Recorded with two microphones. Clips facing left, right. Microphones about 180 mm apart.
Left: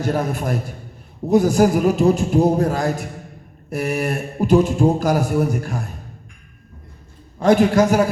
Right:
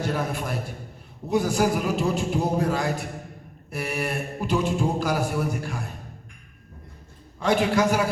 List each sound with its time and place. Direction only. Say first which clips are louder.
0.0 s speech: left 6 dB; 45° left (ahead or behind)
7.3 s speech: left 7 dB; 45° left (ahead or behind)